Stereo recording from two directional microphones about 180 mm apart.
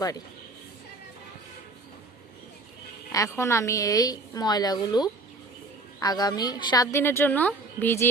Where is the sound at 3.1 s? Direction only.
15° left (ahead or behind).